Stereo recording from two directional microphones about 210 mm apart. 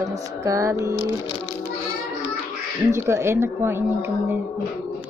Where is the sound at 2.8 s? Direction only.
15° right (ahead or behind).